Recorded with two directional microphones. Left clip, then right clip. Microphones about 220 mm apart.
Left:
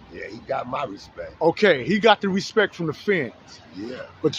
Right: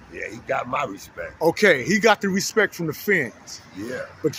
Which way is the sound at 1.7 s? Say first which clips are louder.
Even; 10° left (ahead or behind).